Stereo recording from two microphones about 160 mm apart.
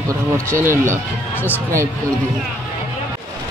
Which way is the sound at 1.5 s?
15° right (ahead or behind).